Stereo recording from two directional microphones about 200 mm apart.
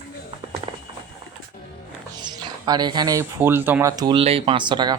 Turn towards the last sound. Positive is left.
turn(degrees=-25)  # may be behind; listen again after turning